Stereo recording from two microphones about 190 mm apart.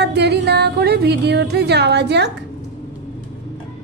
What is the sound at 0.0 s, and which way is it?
Music, 60° right (ahead or behind).